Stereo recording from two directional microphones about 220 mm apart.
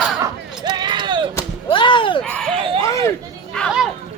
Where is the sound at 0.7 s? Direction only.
20° right (ahead or behind).